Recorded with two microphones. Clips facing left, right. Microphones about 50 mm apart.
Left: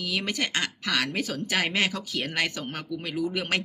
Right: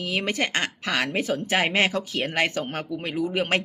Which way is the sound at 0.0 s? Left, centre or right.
Right.